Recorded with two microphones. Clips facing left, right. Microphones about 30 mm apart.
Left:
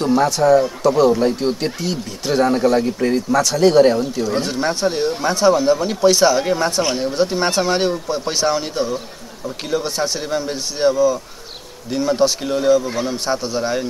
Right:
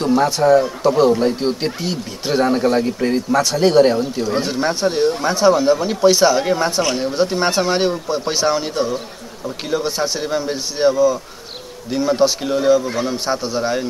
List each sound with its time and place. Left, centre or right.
0.0 s speech: centre